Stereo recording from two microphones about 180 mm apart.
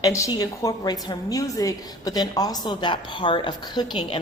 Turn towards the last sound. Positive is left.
turn(degrees=25)  # may be behind; listen again after turning